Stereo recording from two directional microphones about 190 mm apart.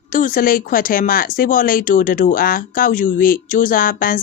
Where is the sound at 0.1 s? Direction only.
45° left (ahead or behind).